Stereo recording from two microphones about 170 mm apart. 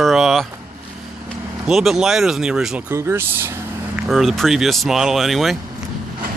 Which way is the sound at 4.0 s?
Centre (ahead or behind).